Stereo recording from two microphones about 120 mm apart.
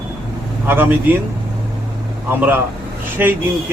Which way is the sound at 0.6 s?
15° right (ahead or behind).